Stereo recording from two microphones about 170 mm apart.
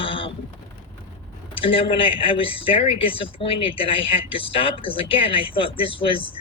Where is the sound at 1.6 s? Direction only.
30° left (ahead or behind).